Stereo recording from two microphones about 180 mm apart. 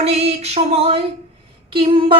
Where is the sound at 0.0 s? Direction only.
35° right (ahead or behind).